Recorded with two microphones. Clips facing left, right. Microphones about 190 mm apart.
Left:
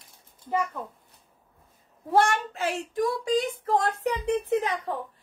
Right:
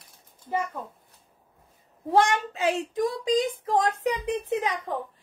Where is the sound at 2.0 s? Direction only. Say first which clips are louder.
Right 1 dB; 15° right (ahead or behind).